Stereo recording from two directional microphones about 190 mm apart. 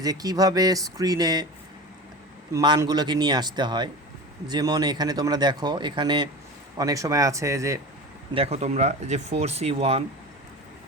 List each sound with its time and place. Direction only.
0.0 s speech: 20° right (ahead or behind)
2.5 s speech: 20° right (ahead or behind)
8.3 s speech: 30° right (ahead or behind)